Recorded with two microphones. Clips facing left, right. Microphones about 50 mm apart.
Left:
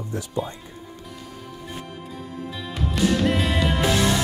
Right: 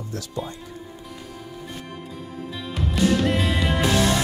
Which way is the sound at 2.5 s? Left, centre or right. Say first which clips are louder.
Right 1 dB; centre.